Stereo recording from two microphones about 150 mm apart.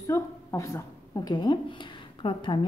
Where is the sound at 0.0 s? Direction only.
20° left (ahead or behind).